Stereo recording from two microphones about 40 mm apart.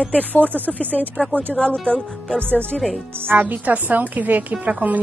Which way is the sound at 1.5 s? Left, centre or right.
Left.